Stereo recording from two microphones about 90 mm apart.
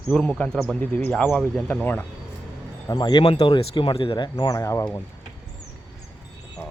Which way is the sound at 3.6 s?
80° left.